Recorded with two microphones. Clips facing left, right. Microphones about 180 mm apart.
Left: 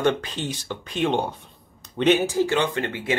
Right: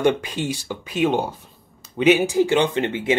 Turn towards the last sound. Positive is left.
turn(degrees=-20)  # may be behind; listen again after turning